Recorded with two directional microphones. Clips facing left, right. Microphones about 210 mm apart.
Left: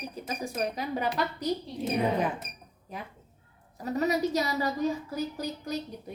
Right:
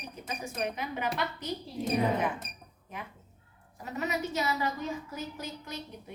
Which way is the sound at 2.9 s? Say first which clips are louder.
Left 3 dB; 35° left (ahead or behind).